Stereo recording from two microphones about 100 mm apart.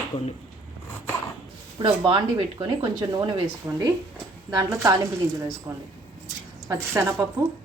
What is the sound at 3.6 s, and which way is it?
A woman's voice, 30° right (ahead or behind).